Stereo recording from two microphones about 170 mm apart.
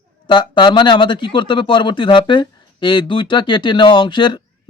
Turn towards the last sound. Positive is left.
turn(degrees=30)  # may be behind; listen again after turning